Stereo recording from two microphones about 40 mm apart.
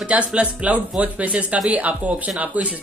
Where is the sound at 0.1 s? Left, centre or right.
Right.